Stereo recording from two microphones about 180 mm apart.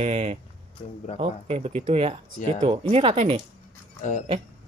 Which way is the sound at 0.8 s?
30° left (ahead or behind).